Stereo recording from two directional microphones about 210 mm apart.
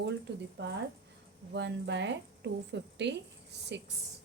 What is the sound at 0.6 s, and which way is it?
A woman's voice, 55° right (ahead or behind).